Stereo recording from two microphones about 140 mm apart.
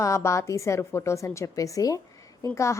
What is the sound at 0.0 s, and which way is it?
A woman's voice, 20° left (ahead or behind).